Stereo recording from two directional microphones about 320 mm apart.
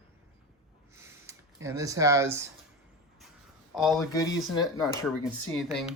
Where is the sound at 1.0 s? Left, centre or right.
Centre.